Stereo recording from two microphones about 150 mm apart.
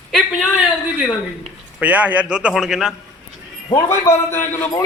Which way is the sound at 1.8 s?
10° right (ahead or behind).